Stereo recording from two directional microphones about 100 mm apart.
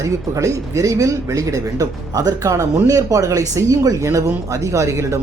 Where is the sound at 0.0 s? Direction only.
30° right (ahead or behind).